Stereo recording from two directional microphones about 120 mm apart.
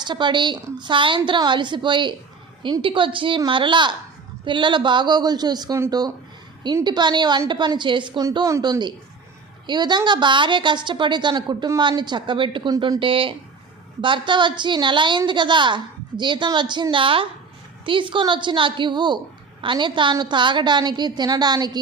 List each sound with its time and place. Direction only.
0.0 s a woman's voice: 40° right (ahead or behind)
6.8 s a woman's voice: 40° right (ahead or behind)
8.4 s a woman's voice: 25° right (ahead or behind)